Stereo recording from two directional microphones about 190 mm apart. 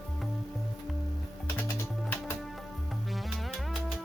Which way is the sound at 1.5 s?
10° left (ahead or behind).